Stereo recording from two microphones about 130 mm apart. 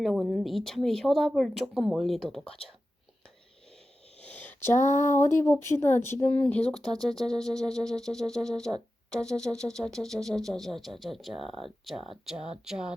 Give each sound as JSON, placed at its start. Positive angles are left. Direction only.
{"t": 0.0, "sound": "music", "side_deg": 0}
{"t": 4.2, "sound": "a sound", "side_deg": 10}
{"t": 5.2, "sound": "speech", "side_deg": 20}
{"t": 6.8, "sound": "music", "side_deg": 5}